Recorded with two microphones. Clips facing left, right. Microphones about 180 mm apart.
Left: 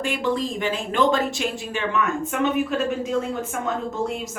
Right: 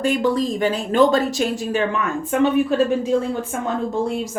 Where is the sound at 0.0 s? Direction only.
40° right (ahead or behind).